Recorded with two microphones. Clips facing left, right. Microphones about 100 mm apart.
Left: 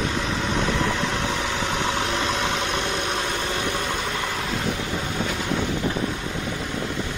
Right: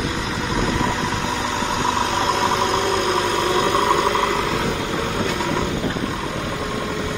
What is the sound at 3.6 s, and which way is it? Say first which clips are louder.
Vehicle: right 8 dB; 70° right (ahead or behind).